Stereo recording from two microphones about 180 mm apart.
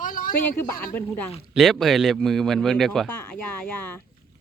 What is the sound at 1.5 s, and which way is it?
Speech, centre (ahead or behind).